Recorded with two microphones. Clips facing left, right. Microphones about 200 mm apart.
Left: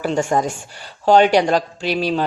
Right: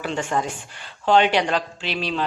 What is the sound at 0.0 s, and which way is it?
Speech, 40° left (ahead or behind).